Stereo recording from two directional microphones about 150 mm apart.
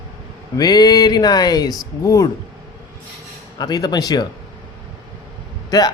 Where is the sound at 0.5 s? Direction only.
25° left (ahead or behind).